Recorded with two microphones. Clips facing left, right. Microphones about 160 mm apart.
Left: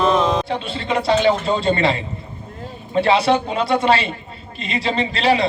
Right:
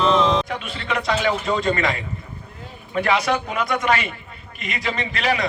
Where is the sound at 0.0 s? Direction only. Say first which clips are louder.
Left 1 dB; 45° left (ahead or behind).